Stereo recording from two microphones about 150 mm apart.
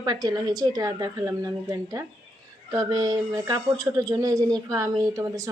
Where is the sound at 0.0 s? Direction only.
25° right (ahead or behind).